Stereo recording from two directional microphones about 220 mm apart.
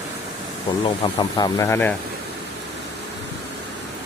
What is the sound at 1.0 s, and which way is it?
Speech, 15° left (ahead or behind).